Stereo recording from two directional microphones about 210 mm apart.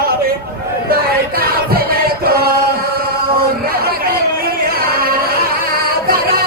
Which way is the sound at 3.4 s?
45° right (ahead or behind).